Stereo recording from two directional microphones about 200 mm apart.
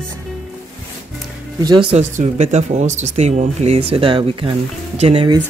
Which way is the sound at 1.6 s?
20° right (ahead or behind).